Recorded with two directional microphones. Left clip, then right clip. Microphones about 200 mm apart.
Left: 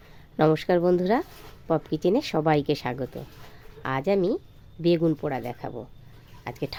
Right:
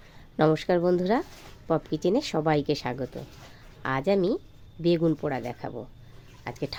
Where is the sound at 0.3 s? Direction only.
5° left (ahead or behind).